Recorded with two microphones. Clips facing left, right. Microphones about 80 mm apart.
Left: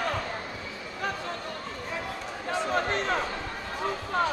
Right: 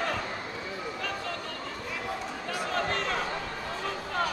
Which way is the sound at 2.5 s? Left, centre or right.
Left.